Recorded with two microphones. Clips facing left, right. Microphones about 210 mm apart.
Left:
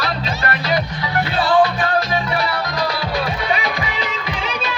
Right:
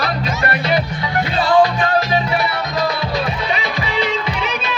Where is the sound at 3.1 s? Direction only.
25° right (ahead or behind).